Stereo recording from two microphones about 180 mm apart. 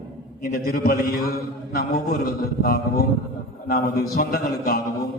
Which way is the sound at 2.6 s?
55° left (ahead or behind).